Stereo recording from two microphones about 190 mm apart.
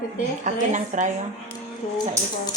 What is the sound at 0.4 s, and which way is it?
Speech, 40° right (ahead or behind).